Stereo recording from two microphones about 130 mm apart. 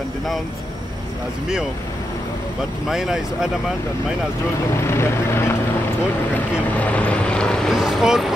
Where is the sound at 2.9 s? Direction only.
5° right (ahead or behind).